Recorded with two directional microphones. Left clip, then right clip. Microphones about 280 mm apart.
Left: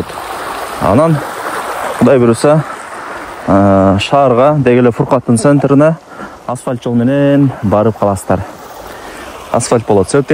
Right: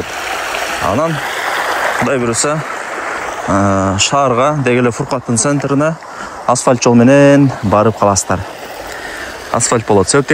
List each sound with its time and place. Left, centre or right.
0.8 s speech: centre
6.4 s speech: centre
9.7 s speech: centre